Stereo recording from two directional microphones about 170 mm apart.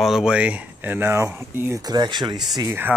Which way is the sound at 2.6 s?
15° right (ahead or behind).